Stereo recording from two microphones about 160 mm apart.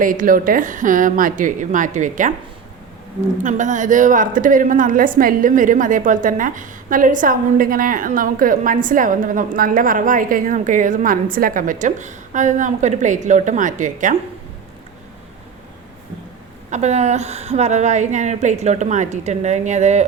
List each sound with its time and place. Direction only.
0.0 s a woman's voice: 60° right (ahead or behind)
3.4 s a woman's voice: 50° right (ahead or behind)
16.6 s a woman's voice: 45° right (ahead or behind)